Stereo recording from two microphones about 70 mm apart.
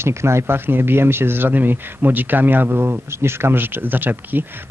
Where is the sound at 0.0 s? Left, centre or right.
Right.